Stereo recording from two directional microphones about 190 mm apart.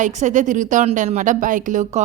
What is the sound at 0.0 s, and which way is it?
A woman's voice, 40° right (ahead or behind).